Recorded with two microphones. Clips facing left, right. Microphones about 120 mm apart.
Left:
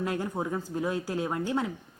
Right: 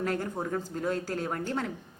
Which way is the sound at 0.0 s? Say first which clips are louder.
Left 1 dB; 15° left (ahead or behind).